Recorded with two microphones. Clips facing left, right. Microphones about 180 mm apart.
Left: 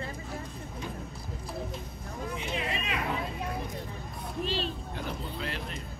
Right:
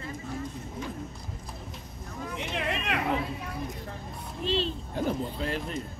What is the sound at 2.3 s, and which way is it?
Hubbub, 70° right (ahead or behind).